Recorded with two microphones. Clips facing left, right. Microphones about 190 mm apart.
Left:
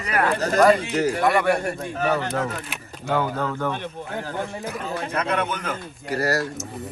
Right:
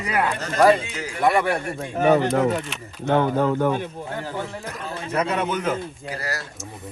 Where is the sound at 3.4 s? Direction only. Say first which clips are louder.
Right 6 dB; 30° right (ahead or behind).